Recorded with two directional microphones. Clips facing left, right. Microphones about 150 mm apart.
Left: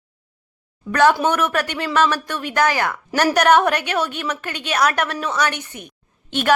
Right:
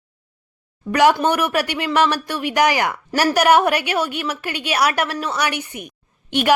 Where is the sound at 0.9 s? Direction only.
15° right (ahead or behind).